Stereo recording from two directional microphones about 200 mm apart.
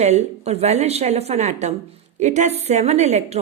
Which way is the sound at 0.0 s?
35° right (ahead or behind).